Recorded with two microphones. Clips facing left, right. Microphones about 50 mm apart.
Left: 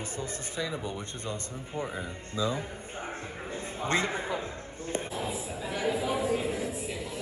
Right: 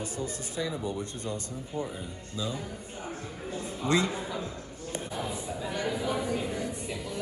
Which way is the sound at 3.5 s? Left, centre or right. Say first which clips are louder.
Right 2 dB; left.